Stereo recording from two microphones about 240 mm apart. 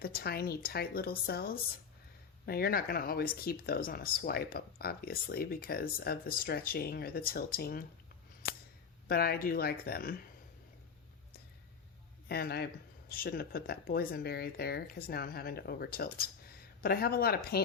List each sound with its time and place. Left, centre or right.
0.0 s speech: left
8.4 s a sound: left
9.0 s speech: left
12.3 s speech: left